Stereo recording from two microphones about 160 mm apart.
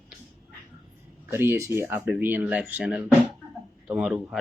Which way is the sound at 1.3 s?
15° right (ahead or behind).